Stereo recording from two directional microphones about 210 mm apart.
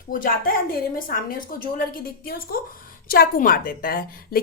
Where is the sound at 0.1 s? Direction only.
40° left (ahead or behind).